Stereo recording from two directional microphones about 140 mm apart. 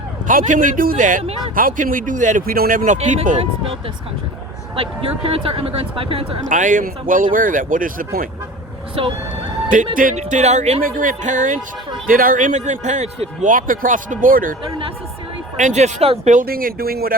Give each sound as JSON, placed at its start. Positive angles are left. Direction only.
{"t": 0.3, "sound": "a man's voice", "side_deg": -70}
{"t": 6.5, "sound": "a man's voice", "side_deg": -70}
{"t": 9.0, "sound": "speech", "side_deg": -40}
{"t": 9.6, "sound": "speech", "side_deg": -75}
{"t": 10.8, "sound": "speech", "side_deg": -70}
{"t": 12.0, "sound": "a man's voice", "side_deg": -90}
{"t": 15.5, "sound": "a man's voice", "side_deg": -60}